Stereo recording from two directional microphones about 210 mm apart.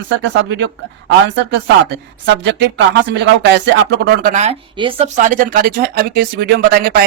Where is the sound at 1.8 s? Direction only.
55° right (ahead or behind).